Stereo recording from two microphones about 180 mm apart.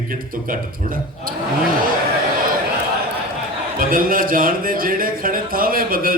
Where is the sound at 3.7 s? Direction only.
50° right (ahead or behind).